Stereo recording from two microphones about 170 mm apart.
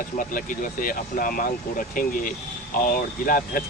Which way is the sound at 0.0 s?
50° left (ahead or behind).